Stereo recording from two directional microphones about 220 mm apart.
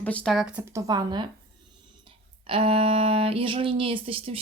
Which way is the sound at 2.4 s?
25° right (ahead or behind).